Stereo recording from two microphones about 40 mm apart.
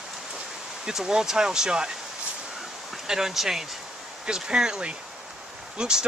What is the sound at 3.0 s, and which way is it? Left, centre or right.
Speech, centre.